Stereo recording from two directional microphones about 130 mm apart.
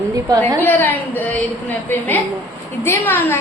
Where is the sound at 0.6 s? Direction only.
15° left (ahead or behind).